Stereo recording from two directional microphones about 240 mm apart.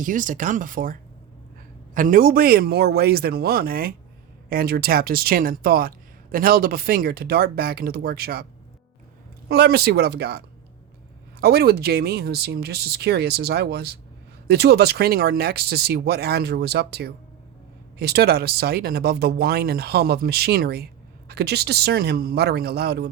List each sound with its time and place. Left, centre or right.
0.0 s speech: right
9.5 s speech: right